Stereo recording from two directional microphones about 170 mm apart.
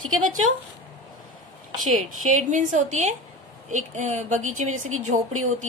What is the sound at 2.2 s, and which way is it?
A woman's voice, 50° right (ahead or behind).